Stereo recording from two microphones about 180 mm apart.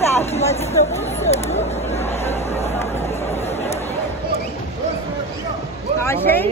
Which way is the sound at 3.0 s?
35° left (ahead or behind).